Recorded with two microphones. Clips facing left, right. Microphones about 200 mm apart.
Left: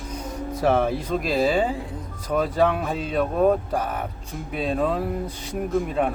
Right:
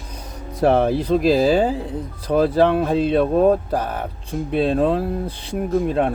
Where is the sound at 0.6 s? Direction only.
35° right (ahead or behind).